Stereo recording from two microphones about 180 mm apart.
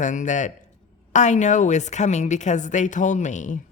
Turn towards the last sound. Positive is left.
turn(degrees=45)  # may be behind; listen again after turning